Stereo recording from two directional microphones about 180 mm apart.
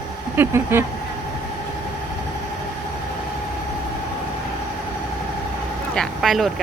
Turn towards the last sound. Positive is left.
turn(degrees=0)  # may be behind; listen again after turning